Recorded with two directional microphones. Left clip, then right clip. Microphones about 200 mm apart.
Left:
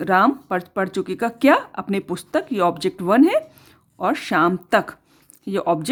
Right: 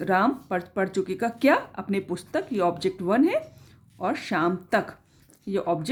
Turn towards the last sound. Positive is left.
turn(degrees=45)  # may be behind; listen again after turning